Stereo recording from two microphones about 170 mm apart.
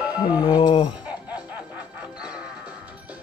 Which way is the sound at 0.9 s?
5° right (ahead or behind).